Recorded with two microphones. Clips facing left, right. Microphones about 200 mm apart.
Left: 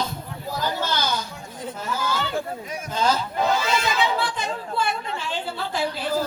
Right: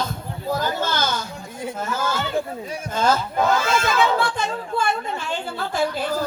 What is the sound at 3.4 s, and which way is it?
Speech, 50° right (ahead or behind).